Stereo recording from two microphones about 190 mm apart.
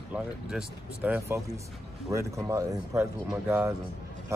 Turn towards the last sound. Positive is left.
turn(degrees=-15)  # may be behind; listen again after turning